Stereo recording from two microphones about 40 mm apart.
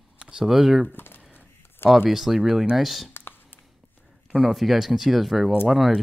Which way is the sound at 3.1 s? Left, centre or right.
Left.